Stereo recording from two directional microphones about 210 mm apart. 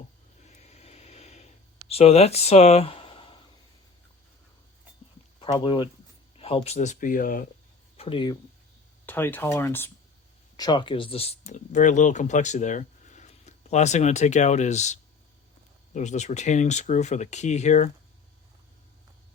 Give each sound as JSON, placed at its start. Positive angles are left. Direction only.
{"t": 0.5, "sound": "a sound", "side_deg": 30}
{"t": 5.4, "sound": "speech", "side_deg": 20}
{"t": 7.9, "sound": "speech", "side_deg": 25}
{"t": 9.0, "sound": "speech", "side_deg": 10}
{"t": 10.6, "sound": "speech", "side_deg": 20}
{"t": 16.0, "sound": "speech", "side_deg": 35}